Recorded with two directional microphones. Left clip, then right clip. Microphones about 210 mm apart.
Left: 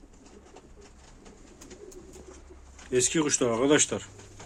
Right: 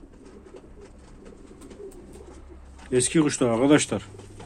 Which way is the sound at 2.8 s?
10° right (ahead or behind).